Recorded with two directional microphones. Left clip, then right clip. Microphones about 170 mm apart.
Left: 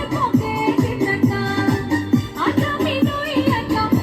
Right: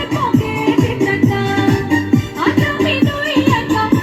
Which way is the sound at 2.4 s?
30° right (ahead or behind).